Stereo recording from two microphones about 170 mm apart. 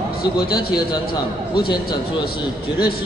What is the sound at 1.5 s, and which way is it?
Speech, 25° left (ahead or behind).